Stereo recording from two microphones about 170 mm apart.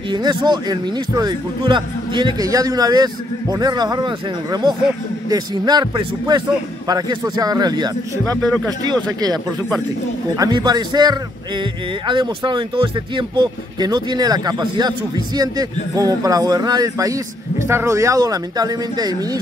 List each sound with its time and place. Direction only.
0.1 s speech: 25° right (ahead or behind)